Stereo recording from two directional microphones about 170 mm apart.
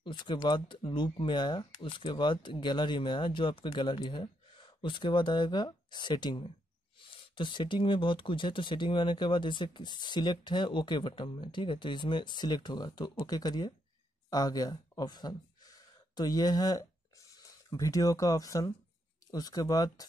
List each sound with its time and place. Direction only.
0.0 s speech: 25° left (ahead or behind)